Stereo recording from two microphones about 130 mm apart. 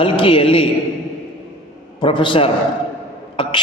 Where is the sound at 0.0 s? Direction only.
45° left (ahead or behind).